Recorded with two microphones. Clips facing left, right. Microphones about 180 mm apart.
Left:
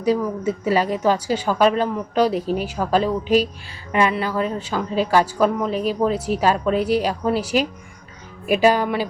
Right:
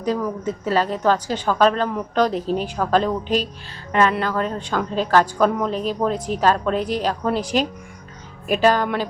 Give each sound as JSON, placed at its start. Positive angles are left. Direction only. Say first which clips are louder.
{"t": 0.0, "sound": "a woman's voice", "louder": "left 3 dB", "side_deg": 10}